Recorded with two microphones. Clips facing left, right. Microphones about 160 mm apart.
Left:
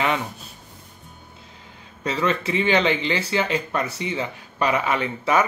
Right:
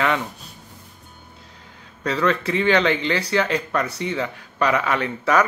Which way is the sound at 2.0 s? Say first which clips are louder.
Right 2 dB; 20° left (ahead or behind).